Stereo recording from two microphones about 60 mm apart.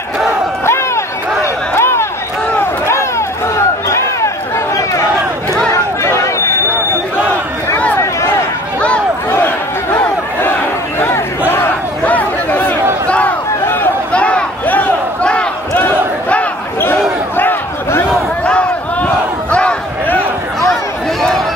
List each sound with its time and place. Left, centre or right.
0.7 s a sound: left
5.7 s chatter: left
9.9 s crowd: left
11.0 s battle cry: left
12.0 s chatter: left
14.1 s a sound: left
15.7 s battle cry: left
17.4 s a sound: left
18.4 s battle cry: left